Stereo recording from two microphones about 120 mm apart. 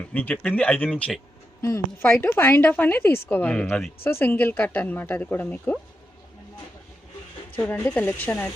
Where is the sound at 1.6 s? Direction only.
20° left (ahead or behind).